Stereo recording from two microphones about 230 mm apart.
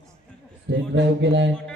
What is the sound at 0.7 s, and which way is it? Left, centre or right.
Speech, right.